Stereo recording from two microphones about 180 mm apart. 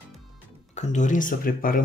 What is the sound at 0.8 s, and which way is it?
Speech, 40° left (ahead or behind).